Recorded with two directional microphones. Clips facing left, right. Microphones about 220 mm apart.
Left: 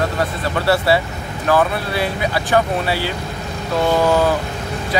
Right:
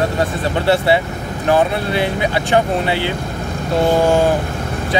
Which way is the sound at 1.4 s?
20° right (ahead or behind).